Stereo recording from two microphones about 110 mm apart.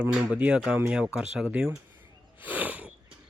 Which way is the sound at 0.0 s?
10° right (ahead or behind).